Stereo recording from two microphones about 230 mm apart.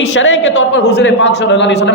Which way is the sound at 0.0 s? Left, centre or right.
Left.